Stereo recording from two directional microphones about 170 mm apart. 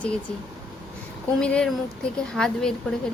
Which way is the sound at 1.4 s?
5° left (ahead or behind).